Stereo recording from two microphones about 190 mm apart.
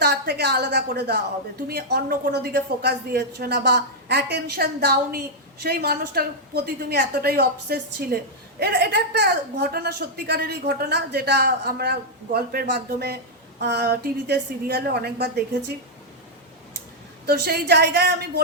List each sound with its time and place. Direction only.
0.0 s a woman's voice: 60° right (ahead or behind)
17.2 s a woman's voice: 55° right (ahead or behind)